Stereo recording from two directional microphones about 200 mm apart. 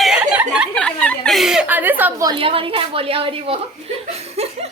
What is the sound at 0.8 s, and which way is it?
Speech, 5° left (ahead or behind).